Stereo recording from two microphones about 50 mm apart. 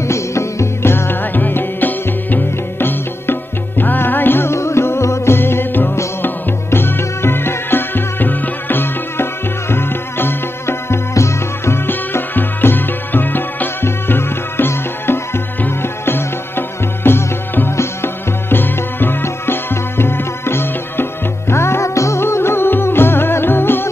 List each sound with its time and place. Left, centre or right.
0.1 s music: left
0.9 s music: left
4.5 s music: left
11.1 s music: left
22.2 s music: left